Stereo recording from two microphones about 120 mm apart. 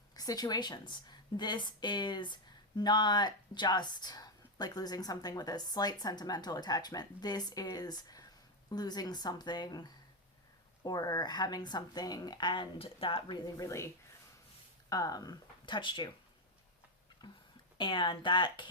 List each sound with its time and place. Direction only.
0.2 s a woman's voice: 35° left (ahead or behind)
10.8 s a woman's voice: 35° left (ahead or behind); by 13.2 s 50° left (ahead or behind)
13.3 s speech: 30° left (ahead or behind); by 16.1 s 45° left (ahead or behind)
17.2 s a woman's voice: 35° left (ahead or behind)